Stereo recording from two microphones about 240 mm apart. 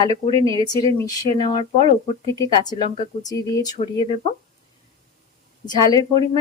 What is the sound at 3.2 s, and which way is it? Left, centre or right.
Speech, centre.